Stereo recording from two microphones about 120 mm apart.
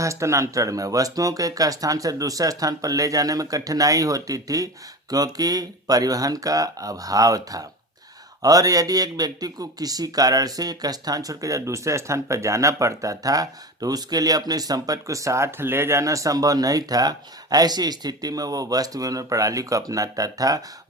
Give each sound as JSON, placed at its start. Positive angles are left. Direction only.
{"t": 0.0, "sound": "speech", "side_deg": -25}